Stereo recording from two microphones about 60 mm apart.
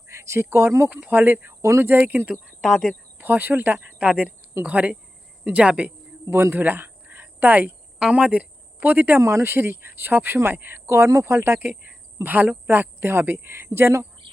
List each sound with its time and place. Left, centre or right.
0.1 s speech: right
0.9 s speech: right
1.1 s speech: right
2.6 s speech: centre
3.2 s speech: right
6.3 s speech: right
6.6 s a sound: right
7.9 s speech: centre; by 9.2 s right
9.2 s speech: right
12.2 s speech: right